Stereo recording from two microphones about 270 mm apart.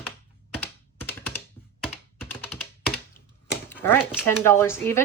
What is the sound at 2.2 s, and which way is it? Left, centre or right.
Computer keyboard, centre.